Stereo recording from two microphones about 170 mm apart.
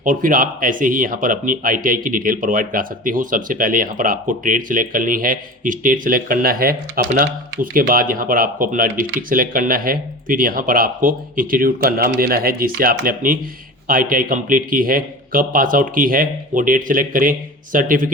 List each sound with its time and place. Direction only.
0.0 s a man's voice: 50° right (ahead or behind)